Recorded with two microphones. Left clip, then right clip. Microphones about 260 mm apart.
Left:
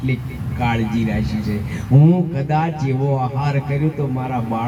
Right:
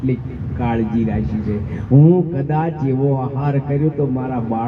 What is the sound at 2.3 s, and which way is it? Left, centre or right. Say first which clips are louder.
A man's voice: even; left.